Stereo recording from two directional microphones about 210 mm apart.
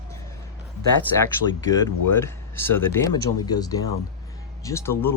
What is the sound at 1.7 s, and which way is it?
Speech, 15° left (ahead or behind).